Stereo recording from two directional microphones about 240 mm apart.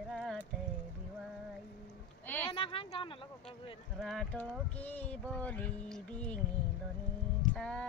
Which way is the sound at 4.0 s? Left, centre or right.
Centre.